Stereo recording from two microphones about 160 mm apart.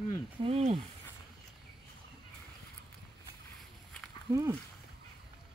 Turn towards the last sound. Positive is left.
turn(degrees=-15)  # may be behind; listen again after turning